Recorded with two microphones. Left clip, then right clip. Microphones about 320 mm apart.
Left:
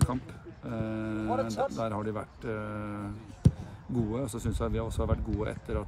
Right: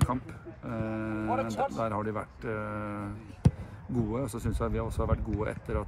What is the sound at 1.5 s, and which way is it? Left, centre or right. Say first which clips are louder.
Speech: even; right.